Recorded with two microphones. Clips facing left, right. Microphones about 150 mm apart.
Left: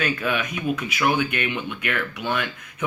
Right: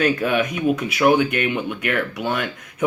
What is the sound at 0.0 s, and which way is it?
Speech, 40° right (ahead or behind).